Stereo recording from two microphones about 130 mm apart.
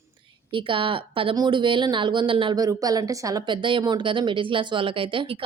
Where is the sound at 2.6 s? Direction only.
30° right (ahead or behind).